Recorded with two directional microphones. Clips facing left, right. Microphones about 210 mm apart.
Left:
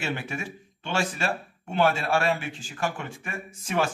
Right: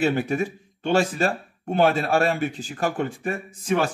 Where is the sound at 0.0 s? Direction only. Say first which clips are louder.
Right 10 dB; 40° right (ahead or behind).